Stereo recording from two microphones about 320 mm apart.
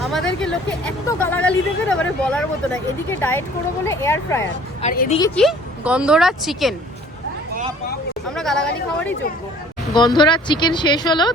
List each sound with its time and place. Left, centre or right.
0.0 s speech: centre
4.8 s a woman's voice: left
5.3 s speech: centre
8.4 s speech: centre
9.9 s speech: centre